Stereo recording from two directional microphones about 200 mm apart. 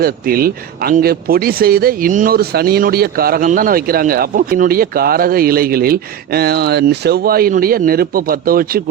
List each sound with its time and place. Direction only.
0.0 s speech: 50° right (ahead or behind)